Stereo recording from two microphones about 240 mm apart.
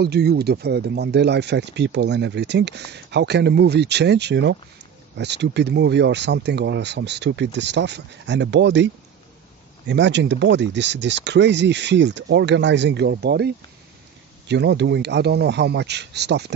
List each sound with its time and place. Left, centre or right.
0.0 s speech: right
14.5 s speech: right